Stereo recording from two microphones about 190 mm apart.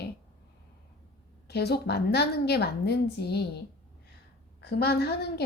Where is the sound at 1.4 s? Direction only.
60° left (ahead or behind).